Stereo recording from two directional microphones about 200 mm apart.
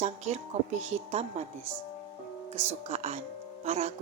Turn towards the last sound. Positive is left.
turn(degrees=-35)  # may be behind; listen again after turning